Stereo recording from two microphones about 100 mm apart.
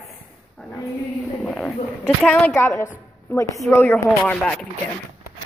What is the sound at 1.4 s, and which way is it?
A woman's voice, centre (ahead or behind).